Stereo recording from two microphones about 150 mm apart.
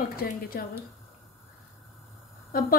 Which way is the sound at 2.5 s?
75° left (ahead or behind).